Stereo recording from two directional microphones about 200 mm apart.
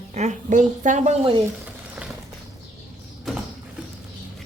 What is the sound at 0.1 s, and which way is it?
A woman's voice, 35° right (ahead or behind).